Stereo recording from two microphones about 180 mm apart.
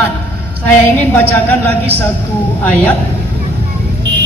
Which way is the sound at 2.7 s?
5° left (ahead or behind).